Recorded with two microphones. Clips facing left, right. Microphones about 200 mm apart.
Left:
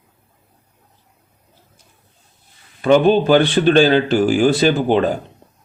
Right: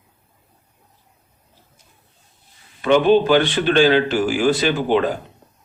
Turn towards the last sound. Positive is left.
turn(degrees=35)  # may be behind; listen again after turning